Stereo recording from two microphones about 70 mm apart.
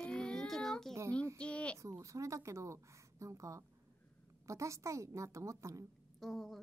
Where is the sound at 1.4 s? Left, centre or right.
Centre.